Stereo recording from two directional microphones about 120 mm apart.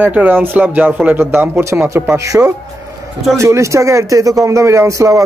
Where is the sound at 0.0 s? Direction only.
15° right (ahead or behind).